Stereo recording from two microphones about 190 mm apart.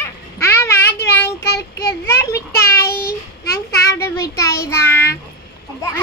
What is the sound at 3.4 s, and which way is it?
Child singing, 15° left (ahead or behind).